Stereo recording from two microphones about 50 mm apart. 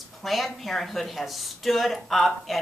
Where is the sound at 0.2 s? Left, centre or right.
Centre.